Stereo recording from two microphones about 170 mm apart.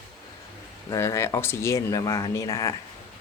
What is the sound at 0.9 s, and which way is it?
Speech, 15° left (ahead or behind).